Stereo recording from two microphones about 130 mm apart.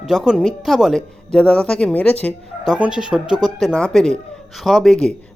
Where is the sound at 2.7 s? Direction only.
10° right (ahead or behind).